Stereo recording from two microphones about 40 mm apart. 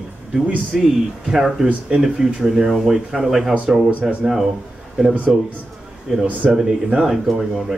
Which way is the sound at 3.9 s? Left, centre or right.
Right.